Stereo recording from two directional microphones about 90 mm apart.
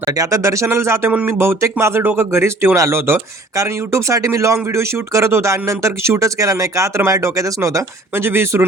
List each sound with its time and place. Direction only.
0.0 s speech: 40° right (ahead or behind)
8.1 s speech: 25° right (ahead or behind)